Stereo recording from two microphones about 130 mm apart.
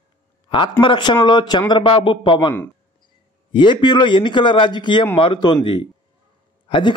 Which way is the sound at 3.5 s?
40° left (ahead or behind).